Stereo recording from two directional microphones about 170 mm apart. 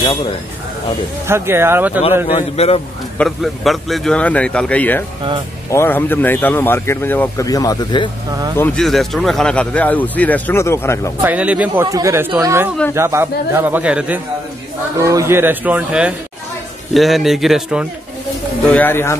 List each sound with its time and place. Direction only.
0.0 s speech: 30° left (ahead or behind)
1.2 s a man's voice: 15° right (ahead or behind)
2.3 s a man's voice: 35° left (ahead or behind)
3.2 s a man's voice: centre (ahead or behind); by 8.1 s 25° left (ahead or behind)
8.3 s speech: 20° right (ahead or behind)
8.5 s a man's voice: 5° left (ahead or behind)
11.2 s a man's voice: 5° right (ahead or behind)
11.8 s a man's voice: 20° right (ahead or behind)
15.0 s a man's voice: 20° right (ahead or behind)
18.7 s a man's voice: 10° left (ahead or behind)